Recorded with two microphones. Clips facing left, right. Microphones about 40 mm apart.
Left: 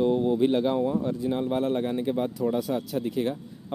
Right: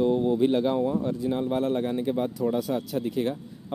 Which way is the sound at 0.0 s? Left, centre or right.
Centre.